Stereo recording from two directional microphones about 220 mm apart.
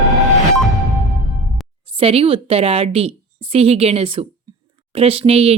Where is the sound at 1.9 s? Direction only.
25° right (ahead or behind).